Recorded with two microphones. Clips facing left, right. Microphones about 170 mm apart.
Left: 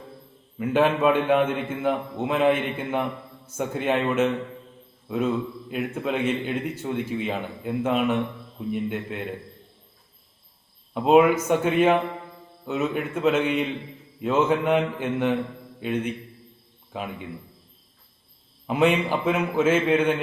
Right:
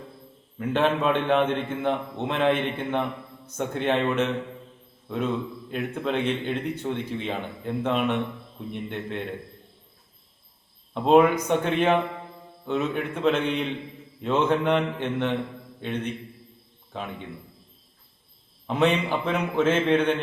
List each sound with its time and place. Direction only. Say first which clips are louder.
0.6 s a man's voice: left 3 dB; 10° left (ahead or behind)
10.9 s a man's voice: left 1 dB; 5° left (ahead or behind)
18.7 s a man's voice: left 2 dB; 10° left (ahead or behind)